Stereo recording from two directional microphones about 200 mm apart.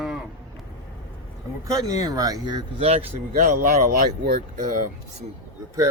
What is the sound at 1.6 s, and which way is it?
Speech, 15° right (ahead or behind).